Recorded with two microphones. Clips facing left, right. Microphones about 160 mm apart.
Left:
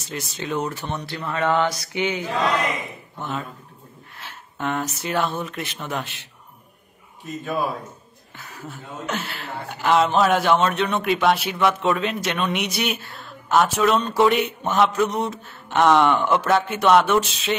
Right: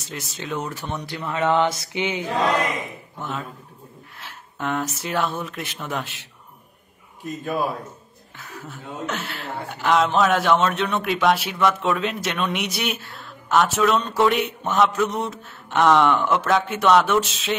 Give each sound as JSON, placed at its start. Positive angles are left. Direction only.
{"t": 0.1, "sound": "a man's voice", "side_deg": 0}
{"t": 3.2, "sound": "a man's voice", "side_deg": 0}
{"t": 8.6, "sound": "a man's voice", "side_deg": 0}